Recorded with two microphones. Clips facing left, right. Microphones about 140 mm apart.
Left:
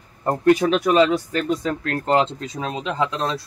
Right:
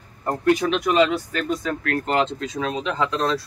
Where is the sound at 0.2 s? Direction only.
30° left (ahead or behind).